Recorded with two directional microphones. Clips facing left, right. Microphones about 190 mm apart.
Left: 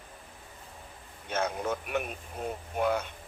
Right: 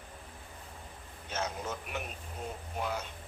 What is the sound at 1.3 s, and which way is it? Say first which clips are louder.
Speech: left 6 dB; 55° left (ahead or behind).